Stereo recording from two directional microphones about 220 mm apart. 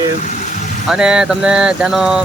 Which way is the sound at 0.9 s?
5° right (ahead or behind).